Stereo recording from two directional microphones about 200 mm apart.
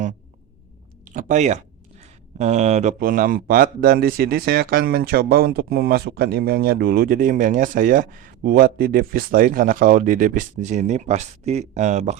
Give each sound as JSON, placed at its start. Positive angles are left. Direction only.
{"t": 1.1, "sound": "speech", "side_deg": -35}